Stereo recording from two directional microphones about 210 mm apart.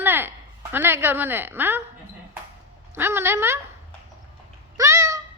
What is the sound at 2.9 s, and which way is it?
Speech, 10° right (ahead or behind).